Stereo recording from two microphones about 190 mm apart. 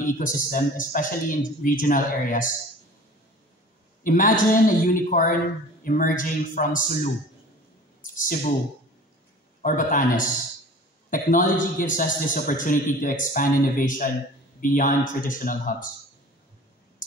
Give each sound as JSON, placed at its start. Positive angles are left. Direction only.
{"t": 0.0, "sound": "a man's voice", "side_deg": 45}
{"t": 4.0, "sound": "a man's voice", "side_deg": 45}
{"t": 9.6, "sound": "a man's voice", "side_deg": 45}